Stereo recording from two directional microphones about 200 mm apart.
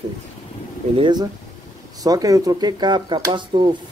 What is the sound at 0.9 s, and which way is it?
Speech, 25° right (ahead or behind).